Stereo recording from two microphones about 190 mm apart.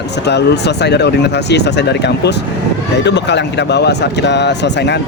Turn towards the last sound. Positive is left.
turn(degrees=65)  # may be behind; listen again after turning